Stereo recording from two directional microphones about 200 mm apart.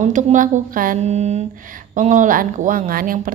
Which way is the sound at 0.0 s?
40° right (ahead or behind).